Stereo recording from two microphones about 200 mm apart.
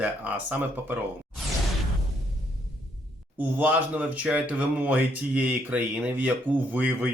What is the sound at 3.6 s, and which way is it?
Speech, 10° right (ahead or behind).